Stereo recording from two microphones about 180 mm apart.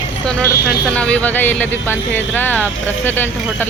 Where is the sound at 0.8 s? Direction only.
5° left (ahead or behind).